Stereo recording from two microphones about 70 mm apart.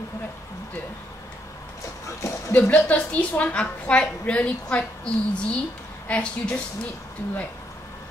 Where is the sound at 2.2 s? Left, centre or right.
Left.